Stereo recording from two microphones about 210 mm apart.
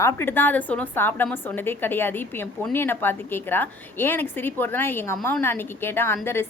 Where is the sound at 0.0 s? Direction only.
10° left (ahead or behind).